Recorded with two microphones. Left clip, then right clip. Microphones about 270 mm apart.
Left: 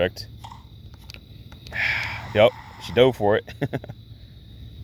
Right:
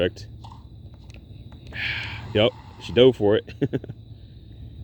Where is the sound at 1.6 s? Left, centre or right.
Left.